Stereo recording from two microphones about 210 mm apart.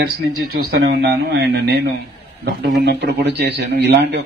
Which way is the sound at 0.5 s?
45° right (ahead or behind).